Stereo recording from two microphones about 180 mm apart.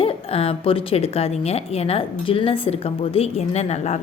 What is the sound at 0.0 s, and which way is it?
A woman's voice, 30° left (ahead or behind).